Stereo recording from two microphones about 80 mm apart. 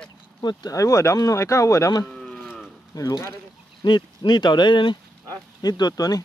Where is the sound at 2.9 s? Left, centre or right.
Left.